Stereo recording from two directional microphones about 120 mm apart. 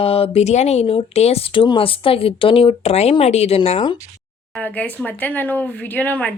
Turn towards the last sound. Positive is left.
turn(degrees=15)  # may be behind; listen again after turning